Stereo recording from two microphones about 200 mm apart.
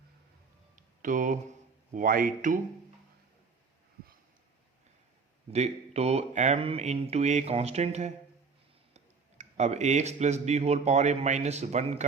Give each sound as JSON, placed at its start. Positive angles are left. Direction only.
{"t": 1.0, "sound": "speech", "side_deg": -40}
{"t": 5.5, "sound": "speech", "side_deg": -30}
{"t": 9.4, "sound": "speech", "side_deg": -35}